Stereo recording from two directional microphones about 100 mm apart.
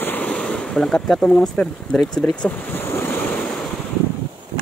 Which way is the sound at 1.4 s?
5° left (ahead or behind).